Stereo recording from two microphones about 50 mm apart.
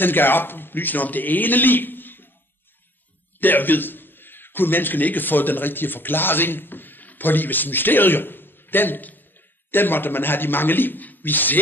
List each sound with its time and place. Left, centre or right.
0.0 s a man's voice: left
3.3 s a man's voice: left